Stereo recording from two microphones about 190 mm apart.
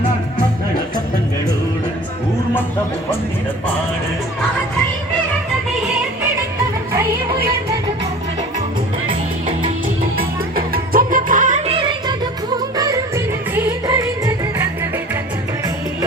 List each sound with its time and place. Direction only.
10.2 s music: 50° right (ahead or behind); by 14.3 s 20° right (ahead or behind)